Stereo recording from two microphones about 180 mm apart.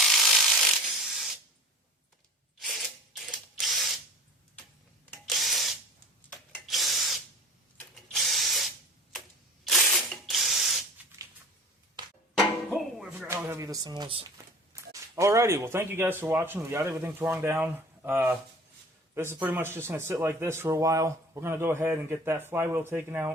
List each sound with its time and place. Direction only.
0.0 s ratchet: centre (ahead or behind)
1.0 s spray: centre (ahead or behind)
3.2 s ratchet: centre (ahead or behind)
5.2 s ratchet: centre (ahead or behind)
6.7 s drill: centre (ahead or behind)
9.6 s drill: centre (ahead or behind)
12.0 s music: 25° right (ahead or behind)
12.3 s music: centre (ahead or behind); by 14.3 s 30° right (ahead or behind)
14.7 s speech: 15° right (ahead or behind)